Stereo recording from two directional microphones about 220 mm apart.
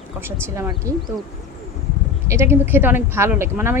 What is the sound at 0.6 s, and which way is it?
Speech, 15° right (ahead or behind).